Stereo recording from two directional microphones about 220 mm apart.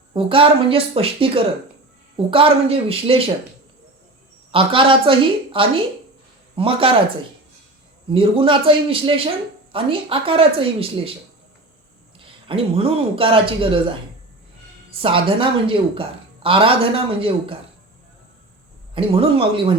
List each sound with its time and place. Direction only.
0.1 s speech: 25° right (ahead or behind)
4.5 s speech: 25° right (ahead or behind)
8.1 s speech: 25° right (ahead or behind)
12.2 s speech: 25° right (ahead or behind)
14.8 s speech: 25° right (ahead or behind)
18.9 s speech: 25° right (ahead or behind)